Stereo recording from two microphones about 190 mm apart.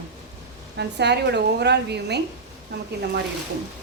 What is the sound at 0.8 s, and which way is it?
A woman's voice, 60° right (ahead or behind).